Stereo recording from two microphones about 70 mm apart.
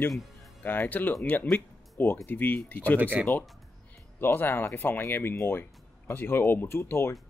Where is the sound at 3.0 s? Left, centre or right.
Right.